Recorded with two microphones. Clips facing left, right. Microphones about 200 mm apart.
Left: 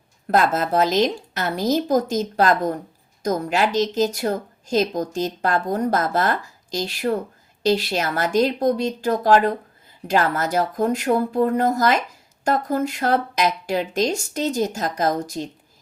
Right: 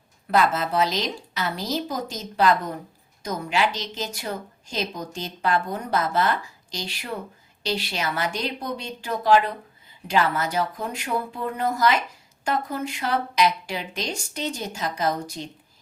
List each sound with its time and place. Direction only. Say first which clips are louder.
0.3 s a woman's voice: left 3 dB; 45° left (ahead or behind)